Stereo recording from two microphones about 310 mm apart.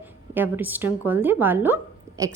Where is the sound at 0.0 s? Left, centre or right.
Centre.